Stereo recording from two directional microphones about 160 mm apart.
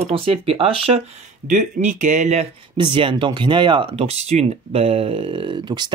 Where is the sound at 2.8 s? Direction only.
30° right (ahead or behind).